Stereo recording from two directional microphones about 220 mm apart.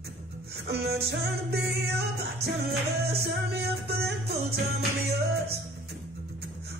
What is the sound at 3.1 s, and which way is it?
Music, 45° right (ahead or behind).